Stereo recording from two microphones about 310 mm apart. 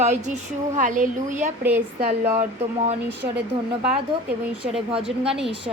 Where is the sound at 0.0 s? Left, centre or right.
Right.